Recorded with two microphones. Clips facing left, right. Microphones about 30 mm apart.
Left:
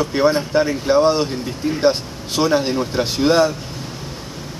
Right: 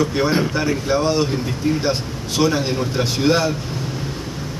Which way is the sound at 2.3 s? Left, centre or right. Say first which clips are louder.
Left 1 dB; centre.